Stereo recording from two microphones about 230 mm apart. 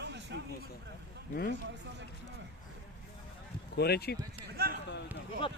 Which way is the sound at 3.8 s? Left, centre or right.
Left.